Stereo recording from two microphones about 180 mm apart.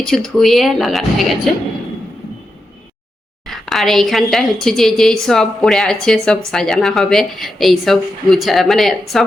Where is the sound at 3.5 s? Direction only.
Centre (ahead or behind).